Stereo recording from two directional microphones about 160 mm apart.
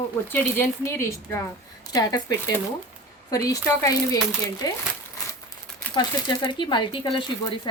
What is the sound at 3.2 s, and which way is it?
Speech, 20° left (ahead or behind).